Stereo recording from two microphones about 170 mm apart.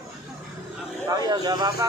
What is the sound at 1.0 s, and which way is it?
Speech, 25° right (ahead or behind).